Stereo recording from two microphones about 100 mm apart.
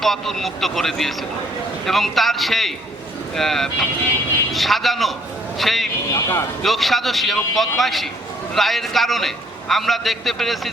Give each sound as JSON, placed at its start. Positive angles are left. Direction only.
{"t": 0.0, "sound": "a man's voice", "side_deg": 0}
{"t": 6.1, "sound": "speech", "side_deg": 30}
{"t": 6.6, "sound": "a man's voice", "side_deg": 0}